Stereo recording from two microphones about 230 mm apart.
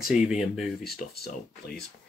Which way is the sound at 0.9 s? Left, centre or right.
Left.